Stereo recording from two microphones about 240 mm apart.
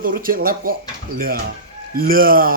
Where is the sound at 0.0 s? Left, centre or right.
Right.